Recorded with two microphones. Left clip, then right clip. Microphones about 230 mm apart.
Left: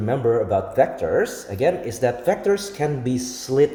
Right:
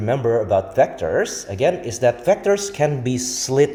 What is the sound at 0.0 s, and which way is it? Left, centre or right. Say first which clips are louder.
A man's voice: right 1 dB; centre.